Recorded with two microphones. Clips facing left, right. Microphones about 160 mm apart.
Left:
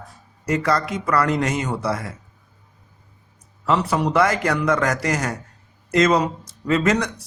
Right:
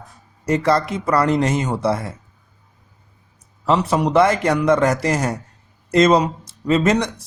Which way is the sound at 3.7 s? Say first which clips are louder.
Right 3 dB; 20° right (ahead or behind).